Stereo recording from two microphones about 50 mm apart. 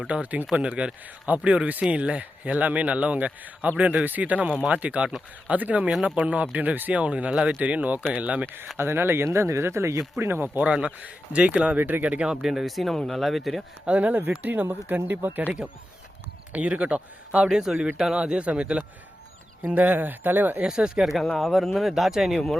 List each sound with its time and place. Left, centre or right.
0.1 s speech: right
7.6 s speech: right
8.8 s speech: right
10.2 s speech: right
10.6 s speech: right
11.8 s speech: right
12.0 s speech: right
12.3 s speech: centre
13.8 s speech: right
16.5 s speech: right
19.7 s speech: right
20.6 s speech: centre
21.3 s speech: centre